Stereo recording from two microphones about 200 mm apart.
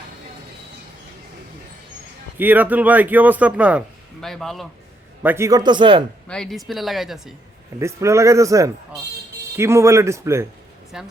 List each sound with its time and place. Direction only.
2.4 s a man's voice: 10° right (ahead or behind)
5.2 s a man's voice: 10° right (ahead or behind)
6.2 s speech: 5° left (ahead or behind)
7.8 s a man's voice: 15° right (ahead or behind)
10.9 s speech: 5° right (ahead or behind)